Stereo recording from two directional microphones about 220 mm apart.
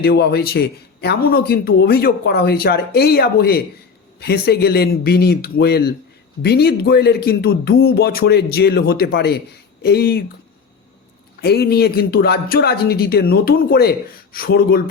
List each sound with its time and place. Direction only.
0.0 s speech: 45° left (ahead or behind)
11.3 s speech: 45° left (ahead or behind)